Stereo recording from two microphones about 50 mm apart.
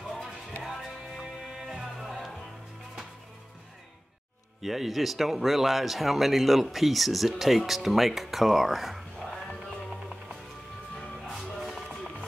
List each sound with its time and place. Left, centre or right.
0.7 s music: centre
1.5 s music: centre
4.6 s speech: centre
9.2 s music: centre
11.3 s music: centre